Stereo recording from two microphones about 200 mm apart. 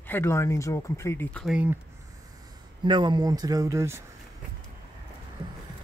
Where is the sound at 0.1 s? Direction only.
10° left (ahead or behind); by 1.8 s 5° right (ahead or behind).